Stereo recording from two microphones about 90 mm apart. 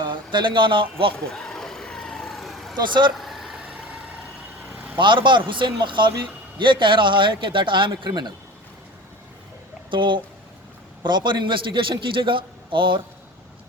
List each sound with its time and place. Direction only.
0.0 s speech: 60° right (ahead or behind)
1.1 s vehicle: 5° left (ahead or behind)
2.7 s a man's voice: 60° right (ahead or behind)
3.2 s vehicle: centre (ahead or behind)
4.7 s vehicle: 15° right (ahead or behind)
4.9 s a man's voice: 60° right (ahead or behind)
9.9 s a man's voice: 60° right (ahead or behind)